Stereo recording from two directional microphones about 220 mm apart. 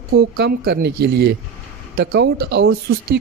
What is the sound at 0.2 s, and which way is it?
Speech, 50° right (ahead or behind).